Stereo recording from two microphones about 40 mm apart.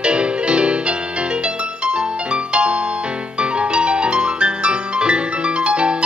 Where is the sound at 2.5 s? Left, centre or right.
Right.